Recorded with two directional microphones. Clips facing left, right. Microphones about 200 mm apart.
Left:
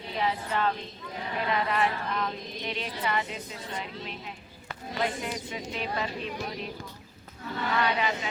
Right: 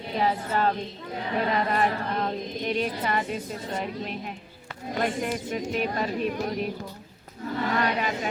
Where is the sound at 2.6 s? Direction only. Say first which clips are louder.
Right 5 dB; 45° right (ahead or behind).